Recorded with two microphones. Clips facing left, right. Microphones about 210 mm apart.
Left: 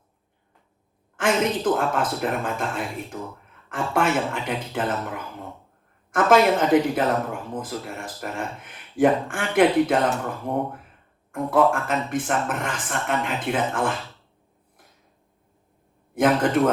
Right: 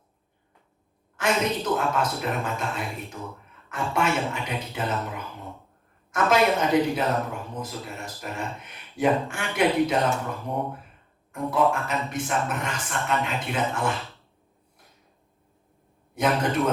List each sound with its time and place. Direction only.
1.1 s speech: 50° left (ahead or behind)
16.1 s speech: 50° left (ahead or behind)